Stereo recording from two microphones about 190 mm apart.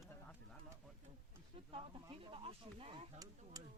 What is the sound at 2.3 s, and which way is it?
Speech, 30° right (ahead or behind).